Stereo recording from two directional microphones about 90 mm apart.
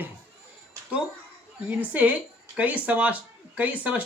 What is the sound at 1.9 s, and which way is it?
A man's voice, 15° right (ahead or behind).